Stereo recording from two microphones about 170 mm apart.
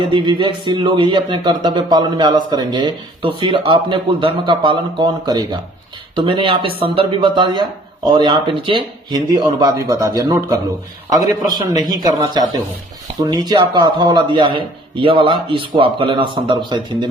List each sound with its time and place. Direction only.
0.1 s speech: 25° right (ahead or behind)